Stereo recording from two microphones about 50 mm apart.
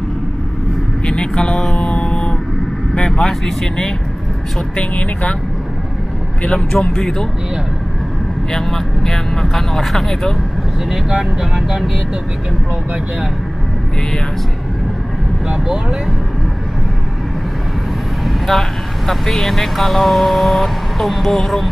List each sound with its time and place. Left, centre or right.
1.0 s vehicle: centre
2.9 s speech: centre
4.7 s speech: left
6.5 s speech: centre
8.5 s speech: centre
11.1 s speech: centre
15.4 s speech: centre
18.2 s speech: centre